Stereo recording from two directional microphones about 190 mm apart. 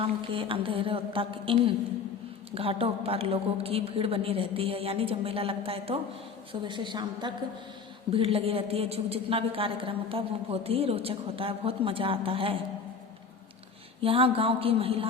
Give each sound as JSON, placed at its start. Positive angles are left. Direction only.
{"t": 0.0, "sound": "a woman's voice", "side_deg": -30}
{"t": 14.0, "sound": "a woman's voice", "side_deg": -30}